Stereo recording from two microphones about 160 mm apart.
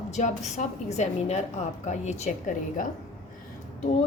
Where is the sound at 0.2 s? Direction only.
45° left (ahead or behind).